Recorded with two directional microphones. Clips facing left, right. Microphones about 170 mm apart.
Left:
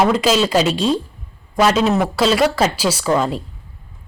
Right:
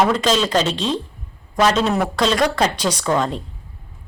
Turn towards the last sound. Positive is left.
turn(degrees=5)  # may be behind; listen again after turning